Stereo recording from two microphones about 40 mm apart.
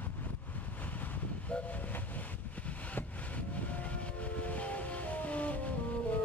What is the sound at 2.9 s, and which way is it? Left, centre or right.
Vehicle, left.